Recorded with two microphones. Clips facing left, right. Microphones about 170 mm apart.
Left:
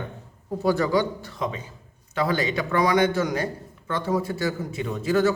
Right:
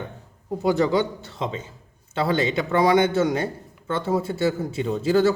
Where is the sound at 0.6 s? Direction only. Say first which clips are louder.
Right 1 dB; 20° right (ahead or behind).